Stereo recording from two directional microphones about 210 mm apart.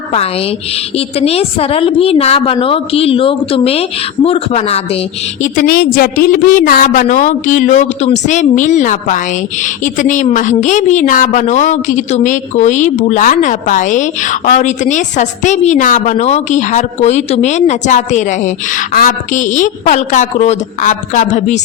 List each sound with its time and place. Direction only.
0.1 s a woman's voice: 30° left (ahead or behind)